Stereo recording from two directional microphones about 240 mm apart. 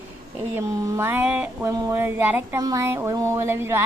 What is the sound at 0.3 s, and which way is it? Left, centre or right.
Speech, centre.